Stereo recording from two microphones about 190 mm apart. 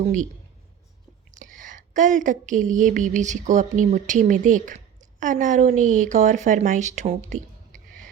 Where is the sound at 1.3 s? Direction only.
45° right (ahead or behind).